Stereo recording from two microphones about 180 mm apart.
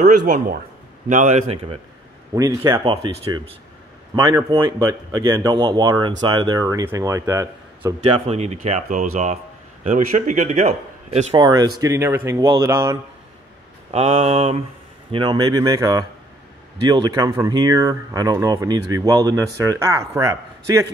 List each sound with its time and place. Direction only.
1.0 s a man's voice: 45° right (ahead or behind)
2.3 s speech: 20° right (ahead or behind)
8.1 s a man's voice: 35° right (ahead or behind)
11.3 s speech: 25° right (ahead or behind)
13.9 s speech: 35° right (ahead or behind); by 20.9 s 20° right (ahead or behind)